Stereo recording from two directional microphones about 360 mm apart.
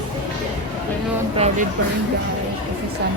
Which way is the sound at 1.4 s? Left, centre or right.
Centre.